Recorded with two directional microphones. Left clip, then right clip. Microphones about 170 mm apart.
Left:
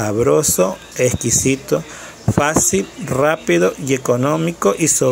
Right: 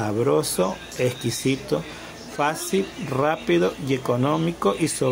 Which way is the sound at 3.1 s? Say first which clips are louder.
Left 7 dB; 20° left (ahead or behind).